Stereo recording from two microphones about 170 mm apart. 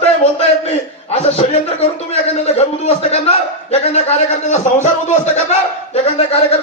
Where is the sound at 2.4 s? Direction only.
35° left (ahead or behind).